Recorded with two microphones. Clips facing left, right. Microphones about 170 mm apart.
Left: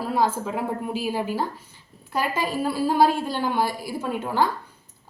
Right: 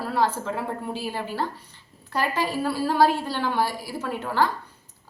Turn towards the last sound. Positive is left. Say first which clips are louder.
# left 1 dB
turn(degrees=15)  # may be behind; listen again after turning